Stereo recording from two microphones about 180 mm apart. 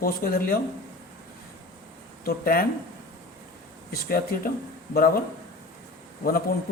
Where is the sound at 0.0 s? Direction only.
55° left (ahead or behind).